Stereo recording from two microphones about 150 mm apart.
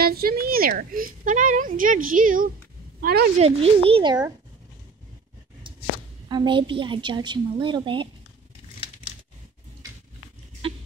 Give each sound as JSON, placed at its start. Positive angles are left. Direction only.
{"t": 0.0, "sound": "a woman's voice", "side_deg": -90}
{"t": 3.0, "sound": "speech", "side_deg": -90}
{"t": 3.3, "sound": "a woman's voice", "side_deg": -40}
{"t": 6.2, "sound": "a woman's voice", "side_deg": -30}
{"t": 10.6, "sound": "a sound", "side_deg": -35}